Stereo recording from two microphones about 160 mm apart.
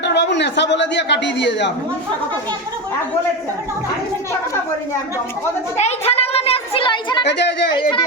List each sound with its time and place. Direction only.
0.0 s a man's voice: 90° left
5.7 s a sound: 40° left (ahead or behind)
7.3 s speech: 90° left
7.7 s speech: 30° left (ahead or behind)